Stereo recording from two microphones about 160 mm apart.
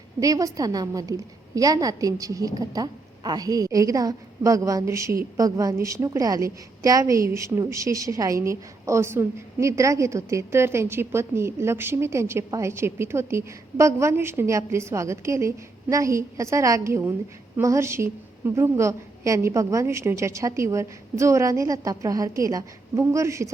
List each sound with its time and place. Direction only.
0.2 s a woman's voice: 20° right (ahead or behind)